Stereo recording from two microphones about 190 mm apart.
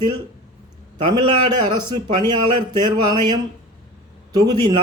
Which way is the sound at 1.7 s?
20° right (ahead or behind).